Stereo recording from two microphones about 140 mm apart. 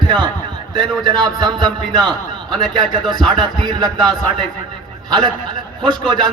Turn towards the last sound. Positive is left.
turn(degrees=-30)  # may be behind; listen again after turning